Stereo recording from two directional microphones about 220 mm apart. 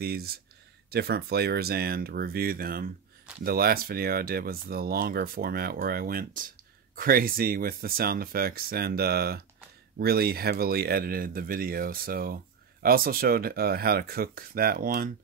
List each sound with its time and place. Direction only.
0.0 s speech: 45° right (ahead or behind)